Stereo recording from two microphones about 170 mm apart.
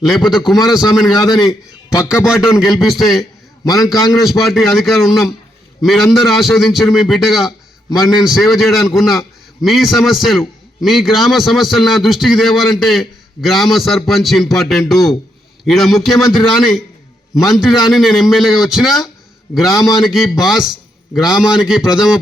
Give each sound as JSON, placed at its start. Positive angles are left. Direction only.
{"t": 0.0, "sound": "a man's voice", "side_deg": 0}
{"t": 1.3, "sound": "a man's voice", "side_deg": 20}
{"t": 2.1, "sound": "a man's voice", "side_deg": -5}